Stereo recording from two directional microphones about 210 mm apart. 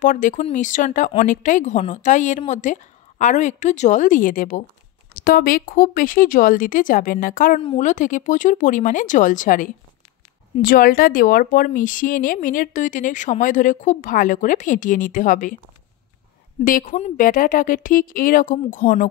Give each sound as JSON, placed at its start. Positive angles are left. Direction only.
{"t": 0.0, "sound": "speech", "side_deg": 40}
{"t": 16.6, "sound": "speech", "side_deg": 35}